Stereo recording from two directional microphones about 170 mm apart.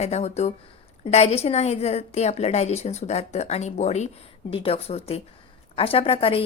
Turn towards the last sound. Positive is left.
turn(degrees=35)  # may be behind; listen again after turning